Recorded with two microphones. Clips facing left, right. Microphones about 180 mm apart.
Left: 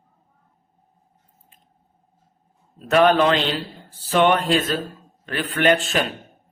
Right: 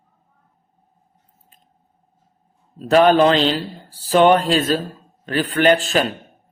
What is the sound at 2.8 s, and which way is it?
A man's voice, 30° right (ahead or behind).